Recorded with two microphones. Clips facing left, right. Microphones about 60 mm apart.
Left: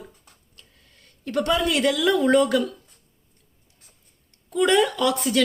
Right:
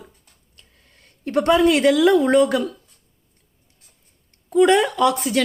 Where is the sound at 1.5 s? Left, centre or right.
Right.